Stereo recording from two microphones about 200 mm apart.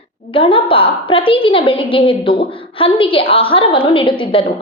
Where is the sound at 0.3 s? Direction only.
25° left (ahead or behind).